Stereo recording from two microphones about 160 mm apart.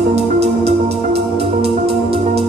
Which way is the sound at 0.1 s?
40° right (ahead or behind).